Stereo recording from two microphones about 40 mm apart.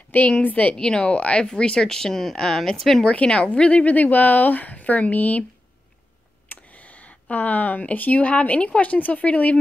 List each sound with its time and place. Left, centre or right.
0.4 s speech: left
0.7 s speech: centre
1.0 s speech: left; by 3.1 s centre
3.1 s a woman's voice: left
3.8 s speech: left
6.5 s speech: left